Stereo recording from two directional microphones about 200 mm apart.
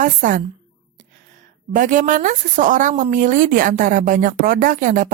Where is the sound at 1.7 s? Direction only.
40° right (ahead or behind).